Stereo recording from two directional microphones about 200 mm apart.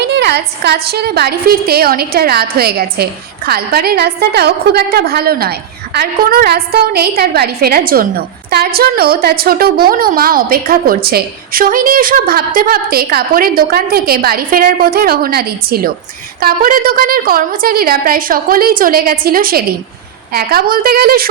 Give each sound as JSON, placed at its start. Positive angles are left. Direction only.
{"t": 0.0, "sound": "a woman's voice", "side_deg": -60}